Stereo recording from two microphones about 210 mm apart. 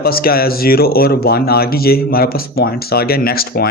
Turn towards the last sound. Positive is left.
turn(degrees=45)  # may be behind; listen again after turning